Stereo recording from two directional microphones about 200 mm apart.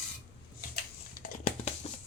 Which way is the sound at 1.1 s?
40° left (ahead or behind).